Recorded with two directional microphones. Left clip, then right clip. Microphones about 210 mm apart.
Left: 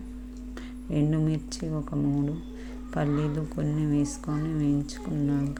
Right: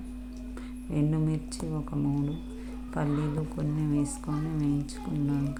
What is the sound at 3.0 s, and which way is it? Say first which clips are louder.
Speech: left 3 dB; 10° left (ahead or behind).